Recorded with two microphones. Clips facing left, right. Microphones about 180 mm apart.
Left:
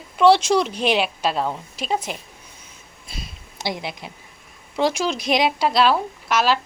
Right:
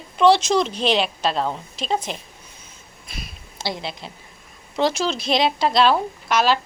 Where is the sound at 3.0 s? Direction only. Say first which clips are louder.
Even; 25° left (ahead or behind).